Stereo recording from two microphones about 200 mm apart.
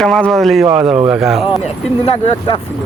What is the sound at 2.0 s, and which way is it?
Speech, 30° left (ahead or behind).